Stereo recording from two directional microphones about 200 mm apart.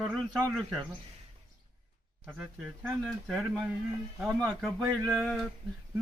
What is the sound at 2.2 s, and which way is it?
Speech, 5° right (ahead or behind).